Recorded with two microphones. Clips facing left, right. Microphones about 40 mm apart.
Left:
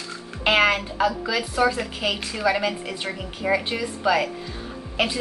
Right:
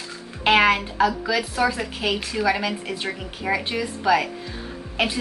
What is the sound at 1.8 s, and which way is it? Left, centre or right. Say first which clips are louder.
Speech: right 1 dB; centre.